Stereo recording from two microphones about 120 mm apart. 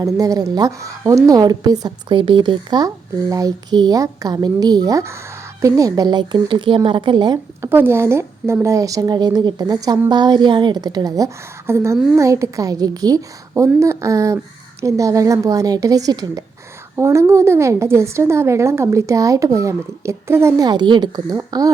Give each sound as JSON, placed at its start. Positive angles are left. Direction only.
{"t": 0.0, "sound": "a woman's voice", "side_deg": -30}
{"t": 7.6, "sound": "a woman's voice", "side_deg": -20}
{"t": 20.7, "sound": "a woman's voice", "side_deg": -40}